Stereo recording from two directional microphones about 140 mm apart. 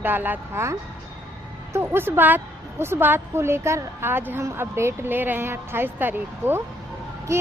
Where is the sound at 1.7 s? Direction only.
15° right (ahead or behind).